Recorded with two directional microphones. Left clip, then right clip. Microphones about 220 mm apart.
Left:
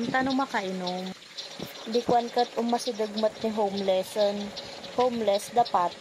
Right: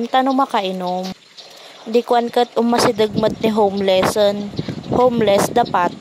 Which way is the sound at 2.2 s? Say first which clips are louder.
Right 9 dB; 50° right (ahead or behind).